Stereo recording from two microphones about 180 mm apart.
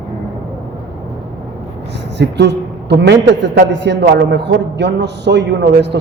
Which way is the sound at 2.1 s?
75° right (ahead or behind).